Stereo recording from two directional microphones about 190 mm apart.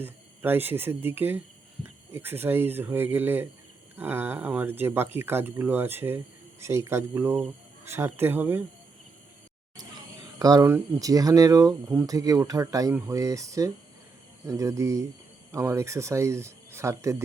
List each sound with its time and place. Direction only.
0.0 s speech: 10° right (ahead or behind)
10.3 s speech: 20° right (ahead or behind)